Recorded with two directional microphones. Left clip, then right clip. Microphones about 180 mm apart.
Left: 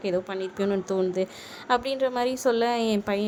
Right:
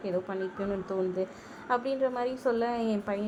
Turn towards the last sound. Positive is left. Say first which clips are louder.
# left 6 dB
turn(degrees=25)  # may be behind; listen again after turning